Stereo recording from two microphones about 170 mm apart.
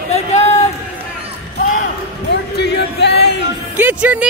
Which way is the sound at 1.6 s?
55° left (ahead or behind).